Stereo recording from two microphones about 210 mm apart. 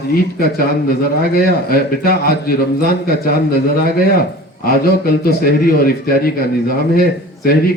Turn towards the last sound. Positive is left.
turn(degrees=45)  # may be behind; listen again after turning